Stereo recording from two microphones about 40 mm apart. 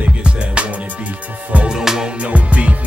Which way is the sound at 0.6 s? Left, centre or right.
Right.